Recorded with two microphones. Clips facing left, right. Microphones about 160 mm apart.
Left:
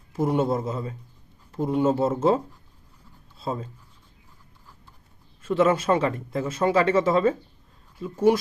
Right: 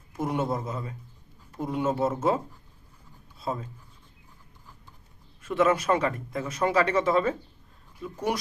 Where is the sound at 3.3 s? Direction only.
30° left (ahead or behind).